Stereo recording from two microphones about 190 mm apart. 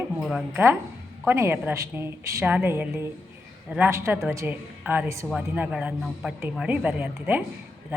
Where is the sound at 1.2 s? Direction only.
10° right (ahead or behind).